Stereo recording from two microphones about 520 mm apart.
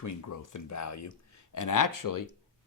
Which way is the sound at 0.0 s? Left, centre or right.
Left.